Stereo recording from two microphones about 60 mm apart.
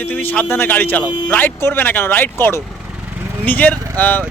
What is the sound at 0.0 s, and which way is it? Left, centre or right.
Speech, left.